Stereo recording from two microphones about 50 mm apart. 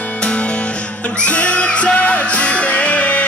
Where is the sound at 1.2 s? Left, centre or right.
Left.